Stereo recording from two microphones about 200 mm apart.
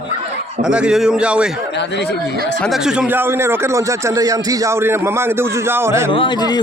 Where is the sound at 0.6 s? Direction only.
5° right (ahead or behind).